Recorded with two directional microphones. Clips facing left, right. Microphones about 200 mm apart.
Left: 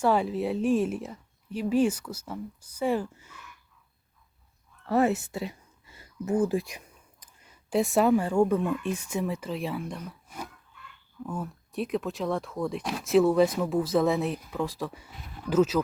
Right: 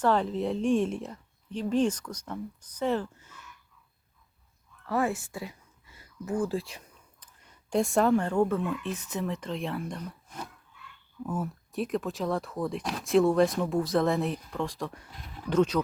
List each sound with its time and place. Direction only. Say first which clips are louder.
0.0 s a woman's voice: left 1 dB; 10° left (ahead or behind)
4.9 s speech: left 4 dB; 25° left (ahead or behind); by 15.8 s 5° left (ahead or behind)